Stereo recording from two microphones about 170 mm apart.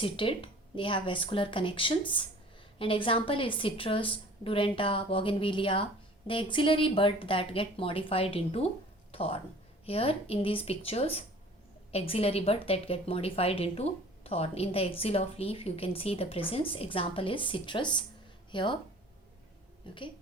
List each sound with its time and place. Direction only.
0.0 s a woman's voice: 30° left (ahead or behind)
19.9 s speech: 30° left (ahead or behind)